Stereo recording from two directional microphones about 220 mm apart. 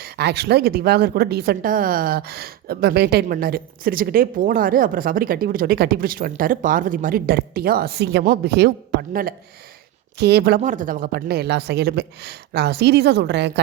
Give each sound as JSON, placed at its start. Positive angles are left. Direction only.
{"t": 0.0, "sound": "speech", "side_deg": -50}